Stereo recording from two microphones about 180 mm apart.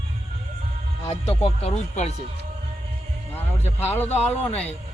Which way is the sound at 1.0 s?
35° left (ahead or behind).